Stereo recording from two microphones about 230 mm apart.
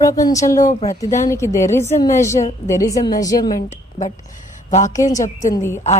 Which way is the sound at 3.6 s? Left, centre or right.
Left.